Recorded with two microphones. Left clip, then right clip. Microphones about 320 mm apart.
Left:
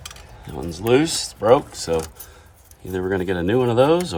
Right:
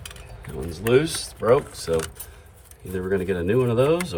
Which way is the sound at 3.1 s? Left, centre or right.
Left.